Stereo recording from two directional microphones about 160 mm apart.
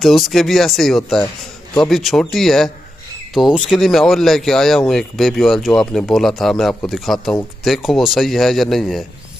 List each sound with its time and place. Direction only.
0.0 s speech: centre (ahead or behind)